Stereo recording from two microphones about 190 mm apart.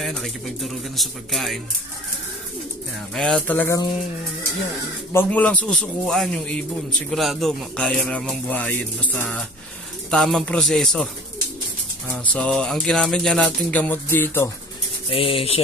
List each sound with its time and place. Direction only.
0.0 s a man's voice: centre (ahead or behind)
3.2 s speech: 5° left (ahead or behind)
5.1 s a man's voice: 5° left (ahead or behind)
12.3 s speech: 5° left (ahead or behind)
15.0 s speech: 30° left (ahead or behind)